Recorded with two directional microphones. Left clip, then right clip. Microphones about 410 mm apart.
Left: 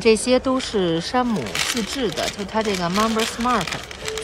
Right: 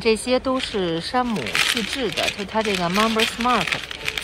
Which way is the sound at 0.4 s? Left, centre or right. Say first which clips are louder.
Left 2 dB; centre.